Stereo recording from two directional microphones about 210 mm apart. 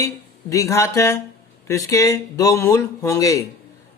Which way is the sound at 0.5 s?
15° left (ahead or behind).